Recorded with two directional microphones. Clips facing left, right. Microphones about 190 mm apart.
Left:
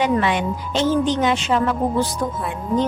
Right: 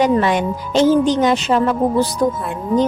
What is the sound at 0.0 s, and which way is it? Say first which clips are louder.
Speech: right 4 dB; 40° right (ahead or behind).